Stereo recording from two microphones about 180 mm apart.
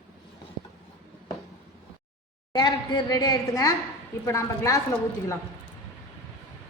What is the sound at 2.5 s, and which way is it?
A woman's voice, 20° left (ahead or behind).